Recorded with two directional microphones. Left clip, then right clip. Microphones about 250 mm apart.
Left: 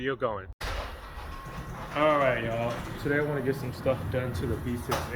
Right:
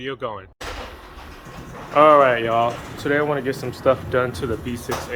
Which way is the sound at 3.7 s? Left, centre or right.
Centre.